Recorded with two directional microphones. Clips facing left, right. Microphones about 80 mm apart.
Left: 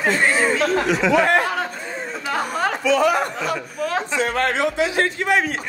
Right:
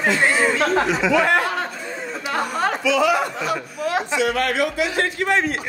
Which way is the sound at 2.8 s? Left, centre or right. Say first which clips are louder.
Left 1 dB; left.